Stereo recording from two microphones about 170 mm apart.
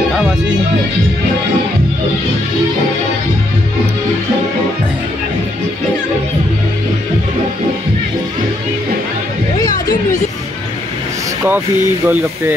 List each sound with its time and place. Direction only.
9.6 s music: 20° left (ahead or behind)
12.1 s speech: 10° right (ahead or behind)